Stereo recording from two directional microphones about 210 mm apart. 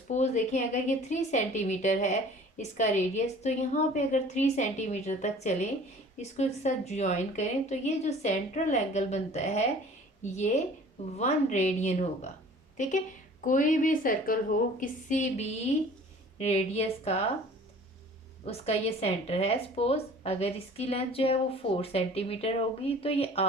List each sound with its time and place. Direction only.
0.1 s a woman's voice: 35° left (ahead or behind)
18.4 s speech: 30° left (ahead or behind)